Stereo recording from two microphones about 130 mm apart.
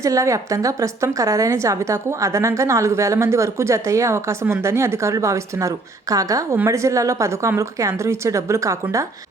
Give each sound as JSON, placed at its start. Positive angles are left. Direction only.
{"t": 0.0, "sound": "a woman's voice", "side_deg": -25}